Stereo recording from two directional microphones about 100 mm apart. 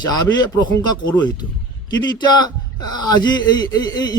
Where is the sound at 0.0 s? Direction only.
45° left (ahead or behind).